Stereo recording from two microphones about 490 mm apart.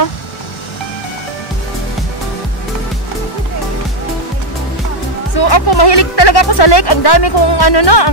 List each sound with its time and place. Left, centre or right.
5.4 s speech: left